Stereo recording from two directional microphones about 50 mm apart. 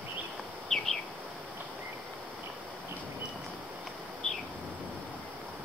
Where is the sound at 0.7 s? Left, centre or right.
Centre.